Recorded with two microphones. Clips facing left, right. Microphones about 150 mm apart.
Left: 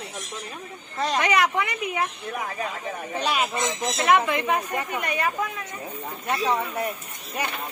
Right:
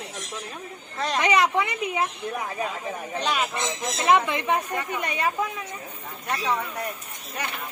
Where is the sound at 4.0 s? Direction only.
25° right (ahead or behind).